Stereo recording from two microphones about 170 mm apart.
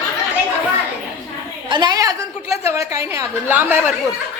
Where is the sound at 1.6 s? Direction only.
25° right (ahead or behind); by 3.9 s 10° right (ahead or behind).